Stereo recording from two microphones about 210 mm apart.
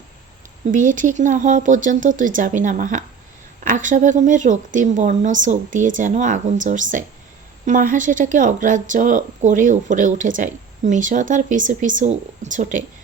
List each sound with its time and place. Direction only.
0.7 s speech: 40° right (ahead or behind)